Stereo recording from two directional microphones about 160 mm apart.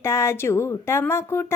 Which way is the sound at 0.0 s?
15° left (ahead or behind).